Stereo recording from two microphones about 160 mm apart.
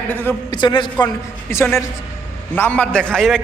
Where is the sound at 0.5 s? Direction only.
30° left (ahead or behind).